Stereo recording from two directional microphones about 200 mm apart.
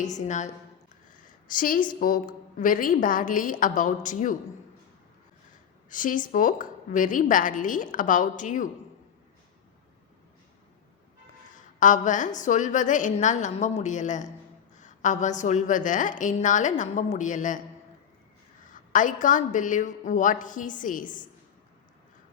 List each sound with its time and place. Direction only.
0.0 s a woman's voice: 35° left (ahead or behind)
5.9 s a woman's voice: 40° left (ahead or behind)
11.5 s a woman's voice: 40° left (ahead or behind)
18.6 s a woman's voice: 40° left (ahead or behind)